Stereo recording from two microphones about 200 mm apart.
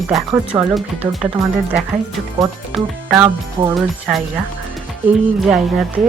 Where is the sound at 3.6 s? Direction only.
25° right (ahead or behind).